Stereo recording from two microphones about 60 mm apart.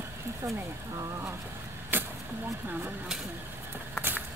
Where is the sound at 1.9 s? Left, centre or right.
Right.